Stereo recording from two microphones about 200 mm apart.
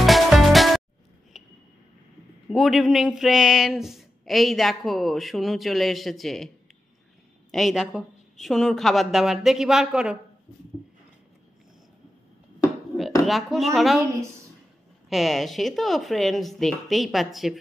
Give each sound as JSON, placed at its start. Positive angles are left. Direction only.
{"t": 0.0, "sound": "music", "side_deg": 0}
{"t": 1.3, "sound": "a sound", "side_deg": 0}
{"t": 2.5, "sound": "speech", "side_deg": 0}
{"t": 7.5, "sound": "speech", "side_deg": 0}
{"t": 13.2, "sound": "a woman's voice", "side_deg": 0}
{"t": 13.9, "sound": "a woman's voice", "side_deg": -15}
{"t": 15.0, "sound": "speech", "side_deg": 0}